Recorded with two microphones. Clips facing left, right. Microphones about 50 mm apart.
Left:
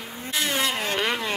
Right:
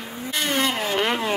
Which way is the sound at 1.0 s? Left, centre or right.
Centre.